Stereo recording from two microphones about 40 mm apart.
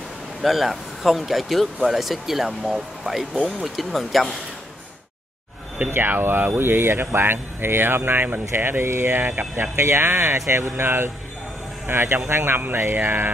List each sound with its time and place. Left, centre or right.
0.4 s speech: centre
5.9 s speech: right
9.8 s speech: right
10.8 s speech: right
11.9 s a man's voice: right
12.5 s speech: right
12.9 s a sound: right